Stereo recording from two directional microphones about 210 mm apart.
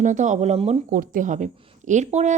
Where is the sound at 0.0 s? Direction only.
35° right (ahead or behind).